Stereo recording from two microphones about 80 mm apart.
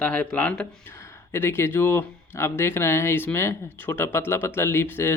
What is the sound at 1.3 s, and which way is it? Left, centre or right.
Speech, left.